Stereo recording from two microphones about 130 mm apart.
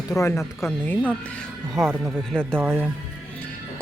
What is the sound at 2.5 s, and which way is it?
Speech, 15° right (ahead or behind).